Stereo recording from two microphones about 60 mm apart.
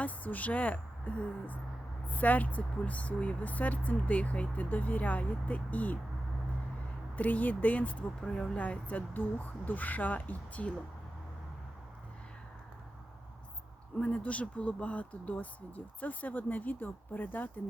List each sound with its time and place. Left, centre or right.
0.0 s speech: left
7.2 s speech: left
8.2 s speech: centre
8.5 s speech: left
14.0 s speech: left